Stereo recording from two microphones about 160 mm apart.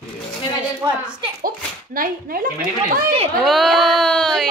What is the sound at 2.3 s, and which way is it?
Speech, 65° right (ahead or behind).